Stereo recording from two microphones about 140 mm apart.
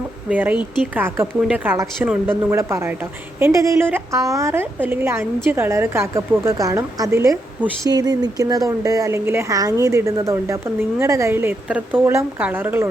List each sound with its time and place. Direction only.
0.3 s a woman's voice: 10° right (ahead or behind)